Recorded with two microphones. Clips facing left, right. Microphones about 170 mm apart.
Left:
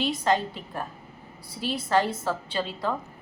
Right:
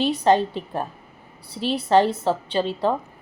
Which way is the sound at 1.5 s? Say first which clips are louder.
Right 6 dB; 70° right (ahead or behind).